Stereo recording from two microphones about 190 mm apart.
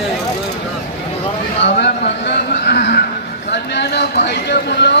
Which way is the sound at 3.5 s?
65° left (ahead or behind).